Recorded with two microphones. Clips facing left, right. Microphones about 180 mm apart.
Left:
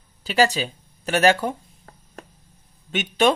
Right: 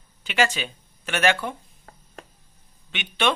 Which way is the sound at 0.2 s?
35° left (ahead or behind).